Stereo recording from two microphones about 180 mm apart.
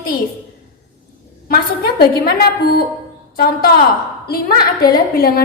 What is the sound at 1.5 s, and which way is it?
A woman's voice, 60° left (ahead or behind).